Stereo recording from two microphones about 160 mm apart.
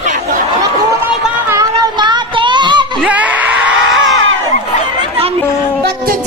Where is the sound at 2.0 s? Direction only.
30° right (ahead or behind).